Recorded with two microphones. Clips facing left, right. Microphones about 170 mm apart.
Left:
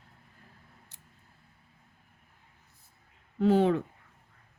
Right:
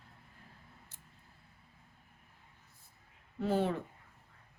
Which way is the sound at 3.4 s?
85° left.